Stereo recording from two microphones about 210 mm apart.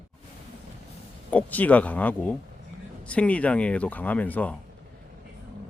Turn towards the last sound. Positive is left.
turn(degrees=5)  # may be behind; listen again after turning